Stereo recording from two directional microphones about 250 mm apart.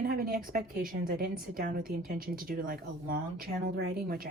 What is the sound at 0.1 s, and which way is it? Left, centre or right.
A woman's voice, right.